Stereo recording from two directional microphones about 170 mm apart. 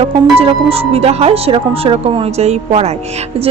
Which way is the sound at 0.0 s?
35° right (ahead or behind).